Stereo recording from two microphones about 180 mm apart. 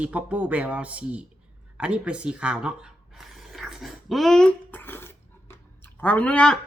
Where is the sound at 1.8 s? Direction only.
5° right (ahead or behind).